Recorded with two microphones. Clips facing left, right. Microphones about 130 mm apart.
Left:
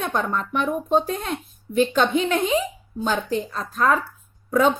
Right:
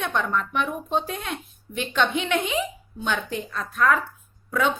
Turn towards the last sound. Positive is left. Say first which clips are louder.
# left 5 dB
turn(degrees=40)  # may be behind; listen again after turning